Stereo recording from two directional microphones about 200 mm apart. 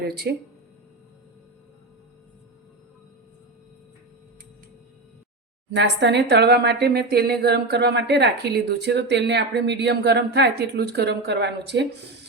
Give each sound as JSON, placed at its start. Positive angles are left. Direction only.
{"t": 0.0, "sound": "speech", "side_deg": -50}
{"t": 5.7, "sound": "speech", "side_deg": -60}